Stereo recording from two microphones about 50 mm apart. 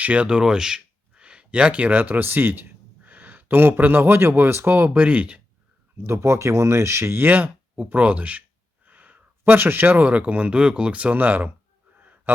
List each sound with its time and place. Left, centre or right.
0.0 s speech: right
0.3 s speech: centre; by 4.9 s right
4.9 s speech: right
6.1 s speech: right
9.4 s speech: right
11.9 s a sound: right